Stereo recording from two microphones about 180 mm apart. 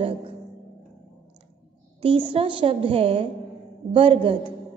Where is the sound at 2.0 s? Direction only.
30° right (ahead or behind).